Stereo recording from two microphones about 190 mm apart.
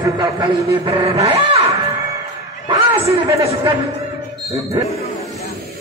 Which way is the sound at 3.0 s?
30° right (ahead or behind).